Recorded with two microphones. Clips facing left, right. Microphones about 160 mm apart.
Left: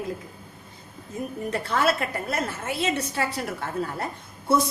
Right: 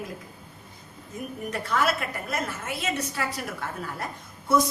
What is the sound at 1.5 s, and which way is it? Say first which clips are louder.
A woman's voice: left 2 dB; 30° left (ahead or behind).